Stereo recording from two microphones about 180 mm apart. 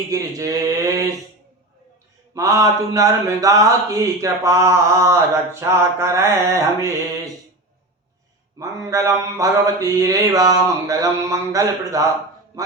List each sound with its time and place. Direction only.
0.1 s speech: 20° right (ahead or behind)
2.3 s speech: 15° right (ahead or behind)
8.5 s speech: 20° right (ahead or behind)